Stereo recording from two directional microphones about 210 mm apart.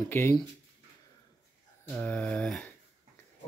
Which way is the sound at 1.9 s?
5° left (ahead or behind).